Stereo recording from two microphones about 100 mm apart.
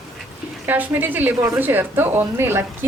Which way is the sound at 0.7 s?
20° right (ahead or behind).